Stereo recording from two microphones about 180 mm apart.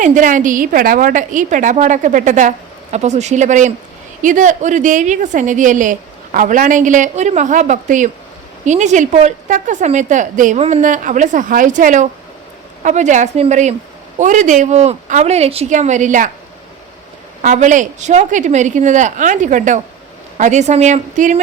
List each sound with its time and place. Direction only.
0.0 s a woman's voice: 45° right (ahead or behind)
17.4 s a woman's voice: 45° right (ahead or behind)